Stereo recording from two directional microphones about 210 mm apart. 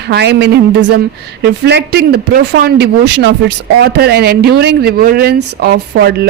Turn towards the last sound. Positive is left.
turn(degrees=-50)  # may be behind; listen again after turning